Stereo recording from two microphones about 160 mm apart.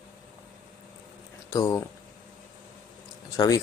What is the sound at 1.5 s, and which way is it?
Speech, 20° left (ahead or behind).